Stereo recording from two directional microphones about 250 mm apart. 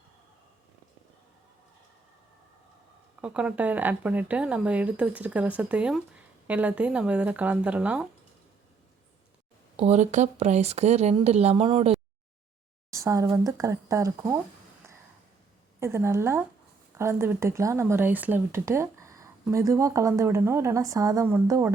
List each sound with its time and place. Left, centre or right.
3.2 s speech: centre
9.7 s speech: right
12.9 s speech: centre
15.8 s speech: centre